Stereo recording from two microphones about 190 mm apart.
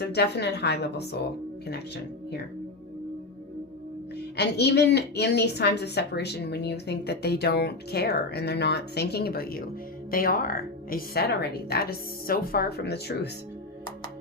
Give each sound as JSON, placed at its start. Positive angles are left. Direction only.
{"t": 0.0, "sound": "a woman's voice", "side_deg": 60}
{"t": 4.4, "sound": "a woman's voice", "side_deg": 60}